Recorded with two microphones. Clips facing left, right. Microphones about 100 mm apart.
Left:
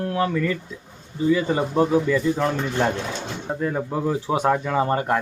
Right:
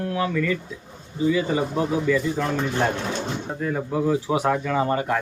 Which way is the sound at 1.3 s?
40° left (ahead or behind).